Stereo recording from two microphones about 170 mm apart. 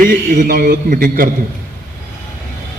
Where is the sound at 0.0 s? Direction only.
55° right (ahead or behind).